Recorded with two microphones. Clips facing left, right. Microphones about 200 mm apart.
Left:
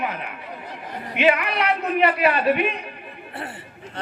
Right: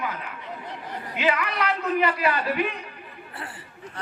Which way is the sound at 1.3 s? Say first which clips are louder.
Left 3 dB; 25° left (ahead or behind).